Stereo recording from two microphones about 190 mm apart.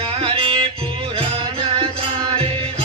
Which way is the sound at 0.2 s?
30° right (ahead or behind).